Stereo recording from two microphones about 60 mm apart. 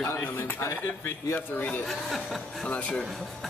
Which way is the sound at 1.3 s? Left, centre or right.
Left.